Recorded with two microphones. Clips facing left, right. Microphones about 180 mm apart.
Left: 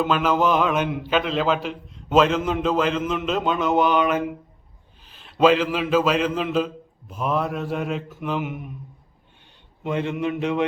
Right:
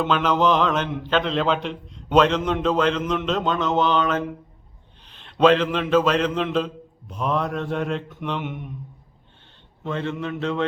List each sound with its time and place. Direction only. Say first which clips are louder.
0.0 s mantra: even; 5° left (ahead or behind)
5.0 s a man's voice: right 1 dB; 5° left (ahead or behind)
7.1 s mantra: even; 5° left (ahead or behind)
9.8 s a man's voice: left 3 dB; 15° left (ahead or behind)